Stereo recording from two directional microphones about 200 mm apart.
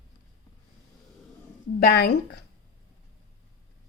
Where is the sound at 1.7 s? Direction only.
50° left (ahead or behind).